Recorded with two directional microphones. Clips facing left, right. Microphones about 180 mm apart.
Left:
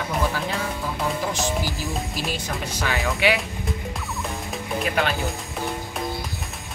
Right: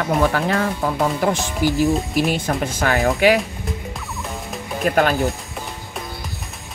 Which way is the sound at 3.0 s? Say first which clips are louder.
Right 7 dB; 40° right (ahead or behind).